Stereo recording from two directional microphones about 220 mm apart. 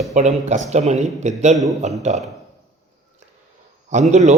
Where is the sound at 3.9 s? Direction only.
30° right (ahead or behind).